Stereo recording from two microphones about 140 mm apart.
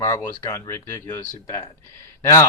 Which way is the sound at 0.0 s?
20° left (ahead or behind).